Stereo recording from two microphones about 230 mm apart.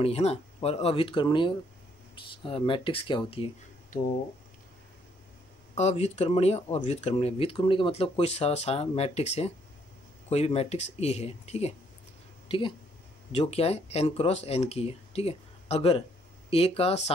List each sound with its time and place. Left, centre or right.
0.0 s speech: left
5.8 s speech: left